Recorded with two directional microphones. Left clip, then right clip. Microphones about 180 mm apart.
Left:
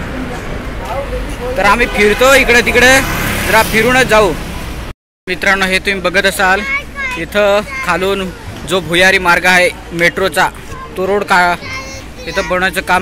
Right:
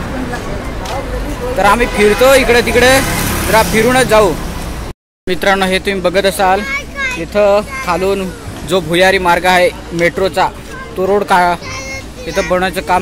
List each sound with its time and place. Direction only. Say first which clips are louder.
1.6 s a man's voice: even; 5° right (ahead or behind)
5.3 s a man's voice: even; 20° right (ahead or behind)
6.6 s a sound: even; 60° right (ahead or behind)
7.2 s a man's voice: right 1 dB; 5° right (ahead or behind)